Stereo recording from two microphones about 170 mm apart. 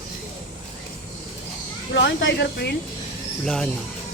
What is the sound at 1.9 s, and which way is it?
Speech, 90° left.